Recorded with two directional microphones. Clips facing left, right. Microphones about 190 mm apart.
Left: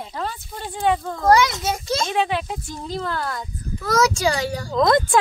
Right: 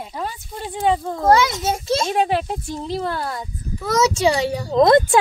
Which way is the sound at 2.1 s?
40° right (ahead or behind).